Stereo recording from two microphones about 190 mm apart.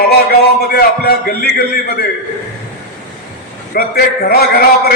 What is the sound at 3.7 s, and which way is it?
A man's voice, 55° left (ahead or behind).